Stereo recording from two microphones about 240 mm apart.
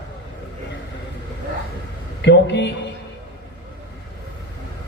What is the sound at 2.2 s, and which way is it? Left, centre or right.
Speech, left.